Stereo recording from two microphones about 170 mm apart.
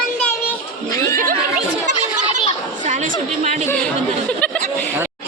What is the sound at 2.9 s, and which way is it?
Chatter, 45° right (ahead or behind).